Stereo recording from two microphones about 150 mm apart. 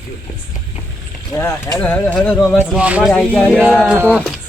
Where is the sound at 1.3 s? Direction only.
20° left (ahead or behind); by 2.6 s 5° left (ahead or behind).